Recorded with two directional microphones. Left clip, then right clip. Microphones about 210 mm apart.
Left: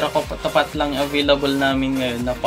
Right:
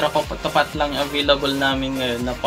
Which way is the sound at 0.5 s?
25° left (ahead or behind).